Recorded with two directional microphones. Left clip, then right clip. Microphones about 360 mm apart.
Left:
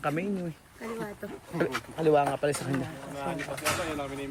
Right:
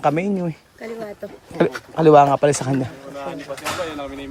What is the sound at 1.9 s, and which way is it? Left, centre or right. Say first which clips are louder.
Speech: right 13 dB; right.